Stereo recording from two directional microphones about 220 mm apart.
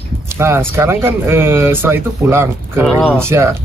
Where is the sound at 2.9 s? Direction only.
5° left (ahead or behind).